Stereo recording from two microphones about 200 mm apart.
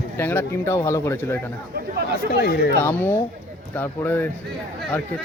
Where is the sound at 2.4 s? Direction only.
50° left (ahead or behind).